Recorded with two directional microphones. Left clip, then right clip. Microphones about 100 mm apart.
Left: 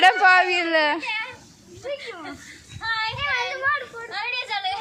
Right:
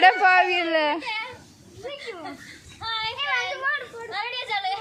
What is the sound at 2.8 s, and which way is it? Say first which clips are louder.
Child singing: left 3 dB; 20° right (ahead or behind).